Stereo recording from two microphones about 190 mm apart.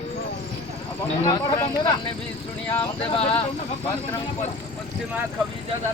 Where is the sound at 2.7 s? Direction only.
25° left (ahead or behind).